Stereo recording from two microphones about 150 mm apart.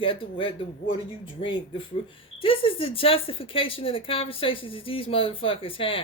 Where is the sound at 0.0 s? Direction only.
35° left (ahead or behind).